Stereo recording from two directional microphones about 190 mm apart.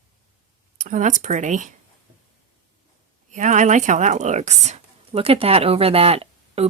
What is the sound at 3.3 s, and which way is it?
Speech, 40° right (ahead or behind).